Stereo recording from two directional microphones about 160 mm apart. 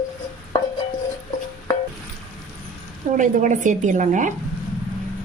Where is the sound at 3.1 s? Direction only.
55° right (ahead or behind).